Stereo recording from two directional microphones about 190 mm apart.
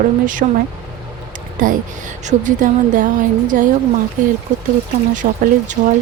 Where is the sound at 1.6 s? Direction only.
45° right (ahead or behind).